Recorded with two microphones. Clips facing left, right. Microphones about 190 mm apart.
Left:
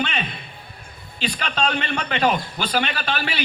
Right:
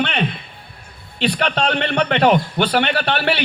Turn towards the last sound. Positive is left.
turn(degrees=-65)  # may be behind; listen again after turning